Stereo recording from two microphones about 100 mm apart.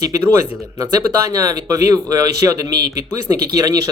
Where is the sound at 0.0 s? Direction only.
35° right (ahead or behind).